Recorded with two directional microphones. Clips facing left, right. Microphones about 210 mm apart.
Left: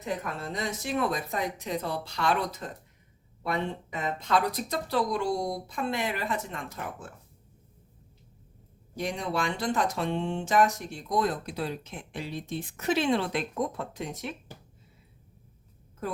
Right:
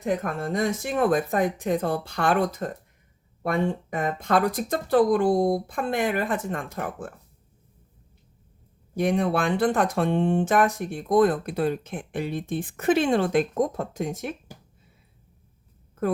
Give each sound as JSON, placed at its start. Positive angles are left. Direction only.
{"t": 0.0, "sound": "speech", "side_deg": -50}
{"t": 9.0, "sound": "speech", "side_deg": -55}